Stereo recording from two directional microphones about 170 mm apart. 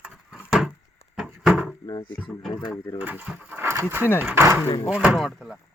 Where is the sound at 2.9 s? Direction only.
10° right (ahead or behind).